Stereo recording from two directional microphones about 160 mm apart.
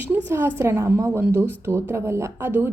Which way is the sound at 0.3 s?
15° right (ahead or behind).